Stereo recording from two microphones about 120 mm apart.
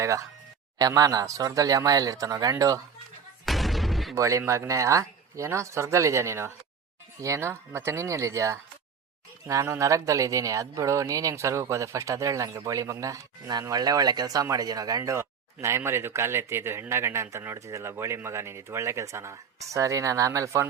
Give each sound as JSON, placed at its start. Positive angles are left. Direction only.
{"t": 0.0, "sound": "speech", "side_deg": -25}
{"t": 3.4, "sound": "a sound", "side_deg": 0}
{"t": 4.1, "sound": "speech", "side_deg": -25}